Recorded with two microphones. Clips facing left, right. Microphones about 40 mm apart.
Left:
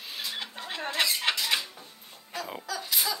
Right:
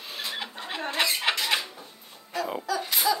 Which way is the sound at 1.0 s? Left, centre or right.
Centre.